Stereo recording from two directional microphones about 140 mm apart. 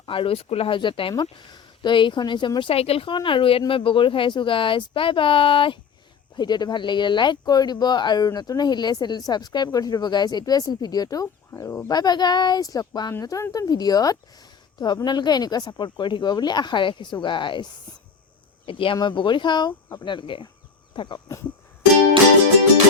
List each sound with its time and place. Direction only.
0.0 s speech: 40° left (ahead or behind); by 11.9 s 20° left (ahead or behind)
11.9 s speech: 30° left (ahead or behind)
20.9 s a sound: 35° left (ahead or behind)